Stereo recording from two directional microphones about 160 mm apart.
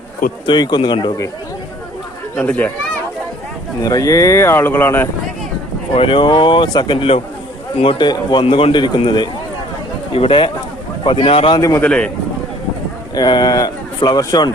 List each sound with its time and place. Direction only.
0.4 s a man's voice: 25° left (ahead or behind)
2.3 s speech: 10° left (ahead or behind)
3.8 s speech: 20° left (ahead or behind)
5.9 s a man's voice: 35° left (ahead or behind)
11.8 s speech: 5° left (ahead or behind)
13.1 s speech: 25° left (ahead or behind)